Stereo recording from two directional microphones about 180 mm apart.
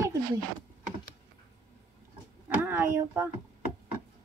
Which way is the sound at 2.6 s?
10° right (ahead or behind).